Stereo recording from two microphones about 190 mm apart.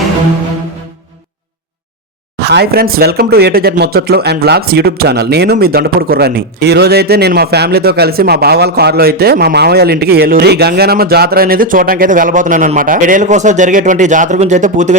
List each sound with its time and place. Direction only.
2.4 s speech: 60° right (ahead or behind); by 14.9 s 40° right (ahead or behind)